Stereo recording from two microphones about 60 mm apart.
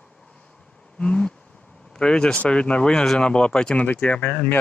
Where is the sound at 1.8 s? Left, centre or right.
Centre.